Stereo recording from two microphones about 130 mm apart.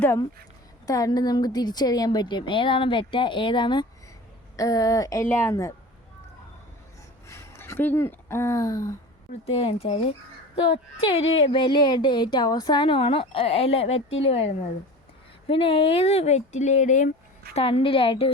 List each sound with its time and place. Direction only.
0.9 s a woman's voice: 25° left (ahead or behind)
4.5 s a woman's voice: 25° left (ahead or behind)
7.3 s speech: 20° left (ahead or behind)
9.5 s a woman's voice: 50° left (ahead or behind)
11.0 s a woman's voice: 50° left (ahead or behind); by 17.1 s 70° left (ahead or behind)
17.5 s a woman's voice: 50° left (ahead or behind)